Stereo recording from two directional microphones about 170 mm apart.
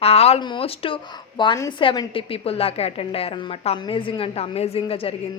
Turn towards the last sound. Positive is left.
turn(degrees=35)  # may be behind; listen again after turning